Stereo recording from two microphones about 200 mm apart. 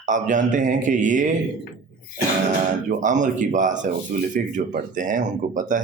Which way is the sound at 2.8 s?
40° right (ahead or behind).